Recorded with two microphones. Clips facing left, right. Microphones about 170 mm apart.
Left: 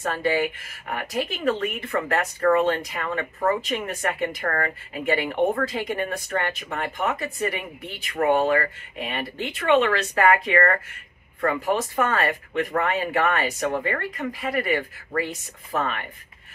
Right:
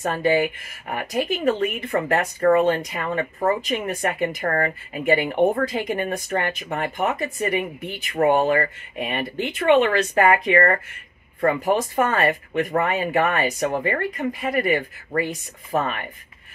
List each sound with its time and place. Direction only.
0.0 s speech: 20° right (ahead or behind)
4.4 s speech: 30° right (ahead or behind)